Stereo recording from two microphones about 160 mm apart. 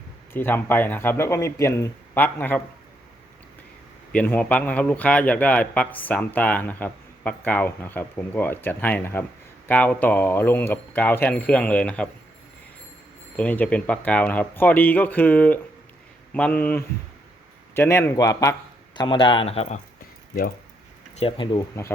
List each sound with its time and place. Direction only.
0.3 s a man's voice: 10° left (ahead or behind)
4.1 s a man's voice: 10° left (ahead or behind)
13.3 s a man's voice: 10° left (ahead or behind)
18.9 s speech: 30° left (ahead or behind)
21.2 s speech: 35° left (ahead or behind)